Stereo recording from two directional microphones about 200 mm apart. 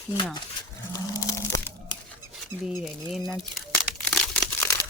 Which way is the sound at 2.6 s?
Centre (ahead or behind).